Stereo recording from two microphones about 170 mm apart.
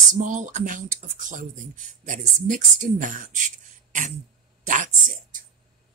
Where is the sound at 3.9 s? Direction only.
45° right (ahead or behind).